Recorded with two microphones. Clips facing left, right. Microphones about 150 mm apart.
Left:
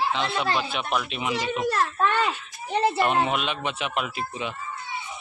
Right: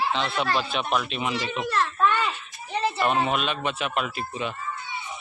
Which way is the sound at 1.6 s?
40° left (ahead or behind).